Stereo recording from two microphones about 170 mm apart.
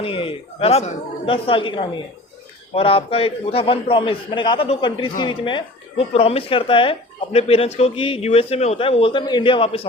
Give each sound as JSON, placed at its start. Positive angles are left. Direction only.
{"t": 0.0, "sound": "a man's voice", "side_deg": 30}